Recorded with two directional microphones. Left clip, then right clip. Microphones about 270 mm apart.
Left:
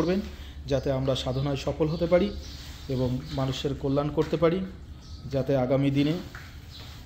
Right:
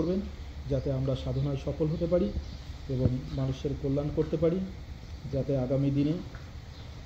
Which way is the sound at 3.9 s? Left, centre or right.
Left.